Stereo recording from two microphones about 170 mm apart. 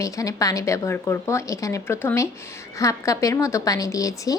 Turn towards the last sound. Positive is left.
turn(degrees=20)  # may be behind; listen again after turning